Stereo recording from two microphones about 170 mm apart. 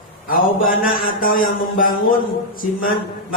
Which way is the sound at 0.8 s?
55° left (ahead or behind).